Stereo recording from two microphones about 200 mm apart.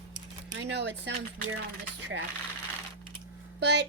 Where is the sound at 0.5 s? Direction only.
60° right (ahead or behind).